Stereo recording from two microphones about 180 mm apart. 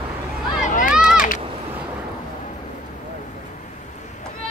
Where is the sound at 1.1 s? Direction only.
50° left (ahead or behind).